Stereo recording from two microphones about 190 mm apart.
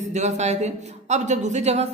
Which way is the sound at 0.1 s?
35° right (ahead or behind).